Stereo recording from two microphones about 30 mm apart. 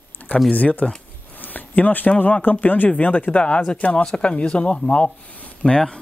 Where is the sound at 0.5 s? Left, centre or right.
Left.